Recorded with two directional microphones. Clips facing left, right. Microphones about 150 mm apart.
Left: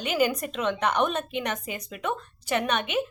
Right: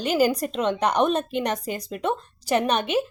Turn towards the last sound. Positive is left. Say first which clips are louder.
# right 4 dB
turn(degrees=-35)  # may be behind; listen again after turning